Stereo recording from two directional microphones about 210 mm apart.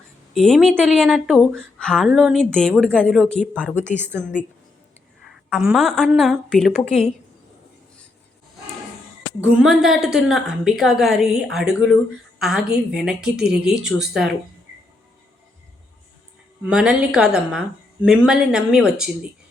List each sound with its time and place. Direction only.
0.3 s a woman's voice: centre (ahead or behind)
3.9 s a woman's voice: 10° right (ahead or behind)
9.4 s a woman's voice: 5° right (ahead or behind)
13.3 s speech: 50° right (ahead or behind)
14.1 s a woman's voice: centre (ahead or behind)
16.6 s a woman's voice: 5° right (ahead or behind)